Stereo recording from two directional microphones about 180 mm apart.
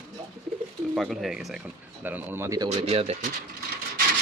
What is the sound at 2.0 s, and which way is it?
Speech, 10° right (ahead or behind).